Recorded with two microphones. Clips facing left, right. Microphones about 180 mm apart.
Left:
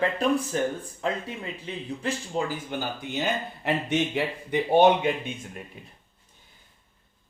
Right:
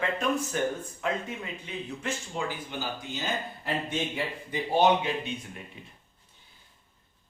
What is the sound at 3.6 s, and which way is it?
A man's voice, 70° left (ahead or behind).